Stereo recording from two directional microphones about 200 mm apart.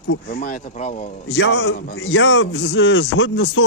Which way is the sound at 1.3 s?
60° left (ahead or behind).